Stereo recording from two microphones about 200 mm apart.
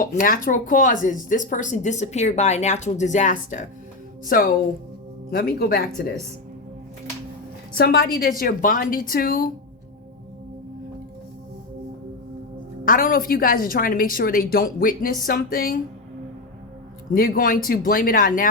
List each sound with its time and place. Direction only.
0.0 s a woman's voice: 45° left (ahead or behind)
7.8 s a woman's voice: 50° left (ahead or behind)
12.8 s a woman's voice: 45° left (ahead or behind)
17.2 s a woman's voice: 45° left (ahead or behind)